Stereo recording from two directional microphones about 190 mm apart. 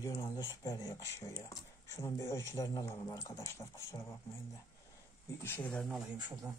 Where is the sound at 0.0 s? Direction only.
15° left (ahead or behind).